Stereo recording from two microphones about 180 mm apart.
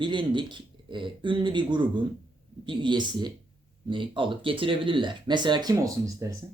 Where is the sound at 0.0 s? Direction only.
25° right (ahead or behind).